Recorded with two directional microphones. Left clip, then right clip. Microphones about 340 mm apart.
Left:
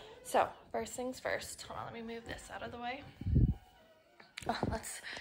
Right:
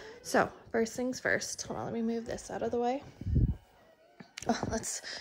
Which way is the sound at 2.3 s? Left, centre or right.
Centre.